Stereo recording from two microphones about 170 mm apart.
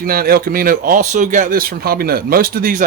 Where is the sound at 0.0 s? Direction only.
60° right (ahead or behind).